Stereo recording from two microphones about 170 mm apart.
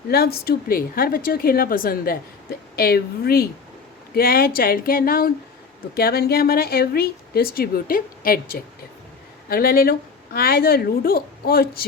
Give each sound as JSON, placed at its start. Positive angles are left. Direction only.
{"t": 0.1, "sound": "a woman's voice", "side_deg": 65}